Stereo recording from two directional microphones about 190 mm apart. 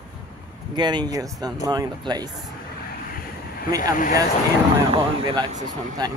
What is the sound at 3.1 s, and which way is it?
Boat, 50° left (ahead or behind).